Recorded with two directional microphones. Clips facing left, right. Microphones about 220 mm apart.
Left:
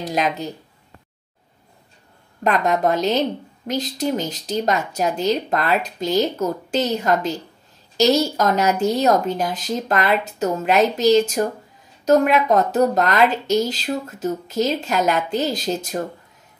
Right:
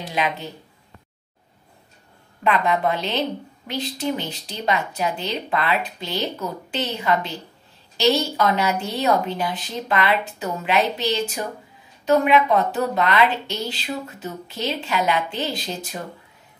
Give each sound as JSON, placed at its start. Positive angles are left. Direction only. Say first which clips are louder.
{"t": 0.0, "sound": "speech", "louder": "left 3 dB", "side_deg": 40}
{"t": 2.4, "sound": "a woman's voice", "louder": "left 2 dB", "side_deg": 40}